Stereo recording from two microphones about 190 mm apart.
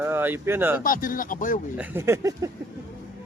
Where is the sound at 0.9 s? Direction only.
45° left (ahead or behind).